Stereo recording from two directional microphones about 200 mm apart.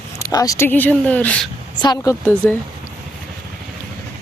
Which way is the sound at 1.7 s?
20° left (ahead or behind).